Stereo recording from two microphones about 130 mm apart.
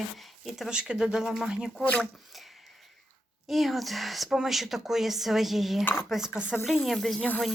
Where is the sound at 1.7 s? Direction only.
10° left (ahead or behind).